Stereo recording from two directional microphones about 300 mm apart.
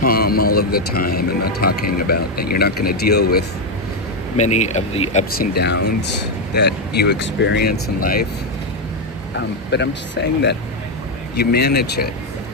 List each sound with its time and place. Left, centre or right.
0.0 s speech: left
9.3 s speech: left